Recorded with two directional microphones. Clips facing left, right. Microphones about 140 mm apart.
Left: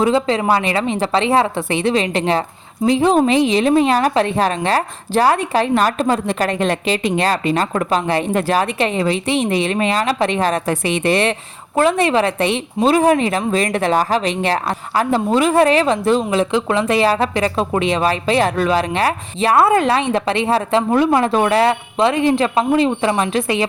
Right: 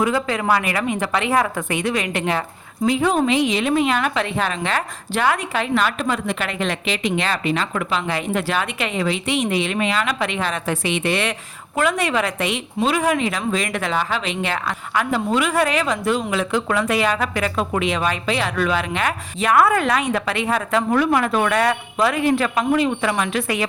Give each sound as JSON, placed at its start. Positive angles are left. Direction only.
{"t": 0.0, "sound": "a woman's voice", "side_deg": 25}